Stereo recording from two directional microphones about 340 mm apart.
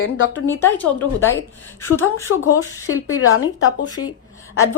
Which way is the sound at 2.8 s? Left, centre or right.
Left.